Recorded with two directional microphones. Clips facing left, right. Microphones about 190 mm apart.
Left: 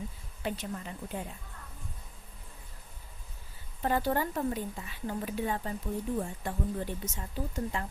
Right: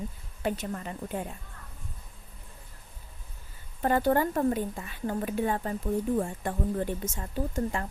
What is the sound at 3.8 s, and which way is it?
Speech, 50° right (ahead or behind).